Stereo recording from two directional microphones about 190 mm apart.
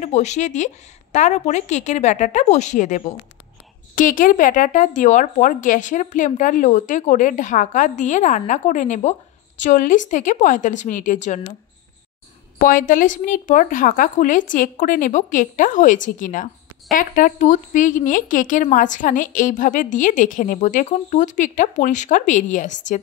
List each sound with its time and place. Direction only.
0.0 s speech: 35° left (ahead or behind)
12.5 s a woman's voice: 45° left (ahead or behind)